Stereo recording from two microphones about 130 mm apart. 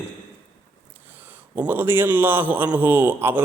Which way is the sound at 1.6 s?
15° right (ahead or behind).